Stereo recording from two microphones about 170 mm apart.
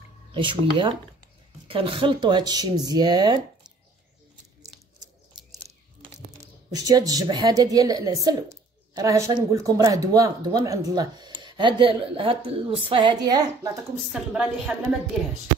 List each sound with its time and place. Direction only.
0.3 s speech: 30° right (ahead or behind)
6.7 s speech: 20° right (ahead or behind)
13.9 s a woman's voice: centre (ahead or behind)